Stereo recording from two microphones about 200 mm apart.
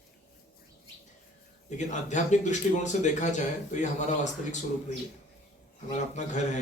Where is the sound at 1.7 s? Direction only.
35° left (ahead or behind).